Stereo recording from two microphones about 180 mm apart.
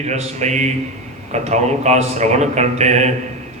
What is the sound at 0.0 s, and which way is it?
A man's voice, 40° right (ahead or behind).